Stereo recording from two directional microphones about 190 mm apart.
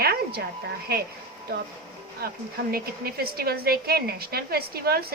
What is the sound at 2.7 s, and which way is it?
A woman's voice, 55° right (ahead or behind).